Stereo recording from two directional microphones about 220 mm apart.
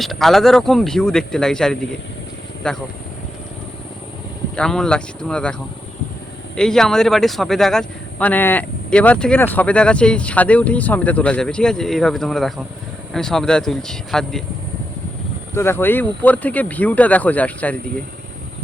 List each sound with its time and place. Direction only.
0.0 s speech: centre (ahead or behind)
4.5 s speech: 5° left (ahead or behind)
6.6 s speech: centre (ahead or behind)
15.5 s speech: 10° left (ahead or behind)